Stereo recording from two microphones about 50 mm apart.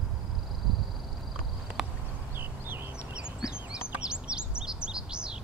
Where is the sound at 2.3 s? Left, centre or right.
Right.